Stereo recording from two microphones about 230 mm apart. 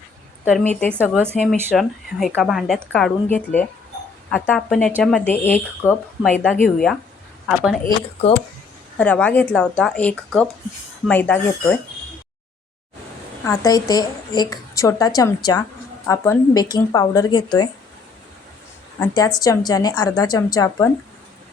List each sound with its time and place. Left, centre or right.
0.7 s a woman's voice: centre
9.0 s a woman's voice: centre
13.4 s a woman's voice: centre
18.9 s a woman's voice: centre